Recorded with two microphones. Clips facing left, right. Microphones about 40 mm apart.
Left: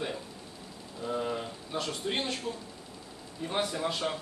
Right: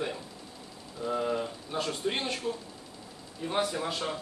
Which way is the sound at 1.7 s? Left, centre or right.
Right.